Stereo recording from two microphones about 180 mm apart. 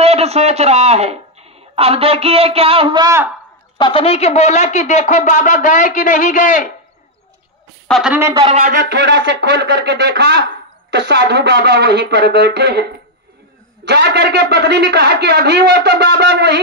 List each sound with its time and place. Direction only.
0.0 s speech: 35° right (ahead or behind); by 3.3 s 20° right (ahead or behind)
3.7 s speech: 25° left (ahead or behind); by 6.7 s 45° left (ahead or behind)
7.9 s speech: 5° right (ahead or behind)
8.2 s a man's voice: 20° right (ahead or behind)
8.5 s speech: 40° right (ahead or behind)
8.9 s a man's voice: 80° right; by 12.8 s 65° right (ahead or behind)
13.8 s a man's voice: 70° right (ahead or behind)